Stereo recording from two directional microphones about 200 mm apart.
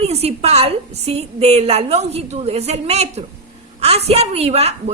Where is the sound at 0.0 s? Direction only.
30° right (ahead or behind).